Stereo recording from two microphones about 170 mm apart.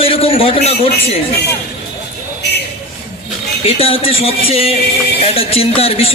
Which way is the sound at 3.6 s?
35° left (ahead or behind).